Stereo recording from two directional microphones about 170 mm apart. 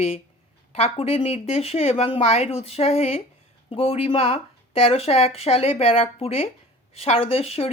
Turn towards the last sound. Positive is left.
turn(degrees=35)  # may be behind; listen again after turning